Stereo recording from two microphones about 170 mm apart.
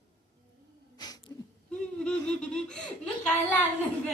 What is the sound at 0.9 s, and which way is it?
Sneeze, 25° left (ahead or behind).